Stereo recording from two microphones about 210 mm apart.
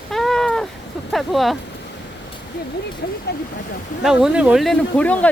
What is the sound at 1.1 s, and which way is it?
Speech, centre (ahead or behind).